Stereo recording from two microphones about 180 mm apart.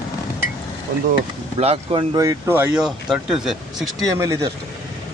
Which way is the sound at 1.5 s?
35° right (ahead or behind).